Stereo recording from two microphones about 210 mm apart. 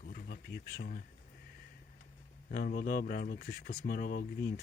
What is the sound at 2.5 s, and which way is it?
Speech, 45° left (ahead or behind).